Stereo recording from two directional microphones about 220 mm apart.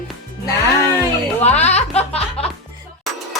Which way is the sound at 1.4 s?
30° left (ahead or behind).